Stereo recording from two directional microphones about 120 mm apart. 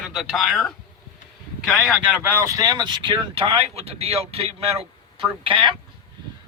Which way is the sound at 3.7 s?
55° right (ahead or behind).